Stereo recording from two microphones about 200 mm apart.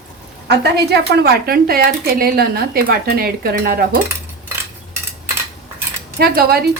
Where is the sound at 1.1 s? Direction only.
55° right (ahead or behind).